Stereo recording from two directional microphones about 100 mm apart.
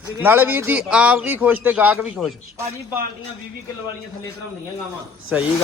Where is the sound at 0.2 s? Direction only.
20° right (ahead or behind).